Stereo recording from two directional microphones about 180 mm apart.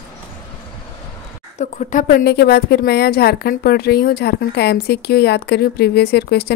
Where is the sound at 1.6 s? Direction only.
45° left (ahead or behind).